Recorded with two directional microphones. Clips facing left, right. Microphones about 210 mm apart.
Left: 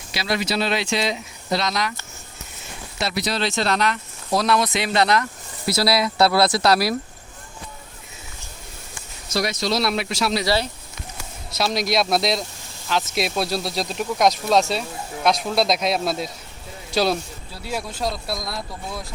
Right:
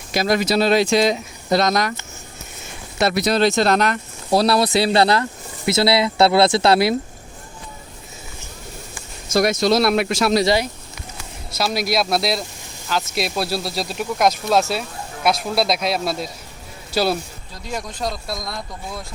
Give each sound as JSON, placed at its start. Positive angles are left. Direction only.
{"t": 0.1, "sound": "speech", "side_deg": -45}
{"t": 3.0, "sound": "speech", "side_deg": -50}
{"t": 4.3, "sound": "speech", "side_deg": -35}
{"t": 9.3, "sound": "speech", "side_deg": -50}
{"t": 10.4, "sound": "speech", "side_deg": -15}
{"t": 11.5, "sound": "speech", "side_deg": -5}
{"t": 17.5, "sound": "speech", "side_deg": 5}